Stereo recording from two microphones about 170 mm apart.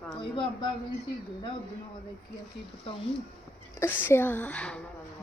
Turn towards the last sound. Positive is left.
turn(degrees=5)  # may be behind; listen again after turning